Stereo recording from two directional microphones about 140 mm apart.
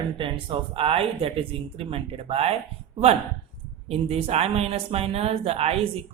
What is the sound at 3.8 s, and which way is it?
Speech, 45° right (ahead or behind).